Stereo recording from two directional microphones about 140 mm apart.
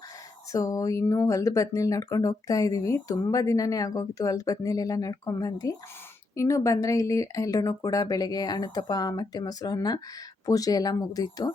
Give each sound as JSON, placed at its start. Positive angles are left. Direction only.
{"t": 0.5, "sound": "speech", "side_deg": 25}